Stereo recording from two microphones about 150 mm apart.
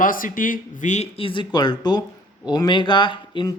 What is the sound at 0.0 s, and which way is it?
A man's voice, 65° left (ahead or behind).